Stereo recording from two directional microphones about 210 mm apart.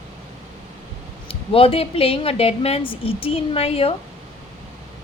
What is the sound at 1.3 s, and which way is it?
A woman's voice, 25° left (ahead or behind).